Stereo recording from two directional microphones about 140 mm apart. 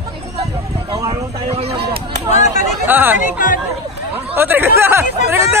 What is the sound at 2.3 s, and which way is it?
Chatter, 55° left (ahead or behind).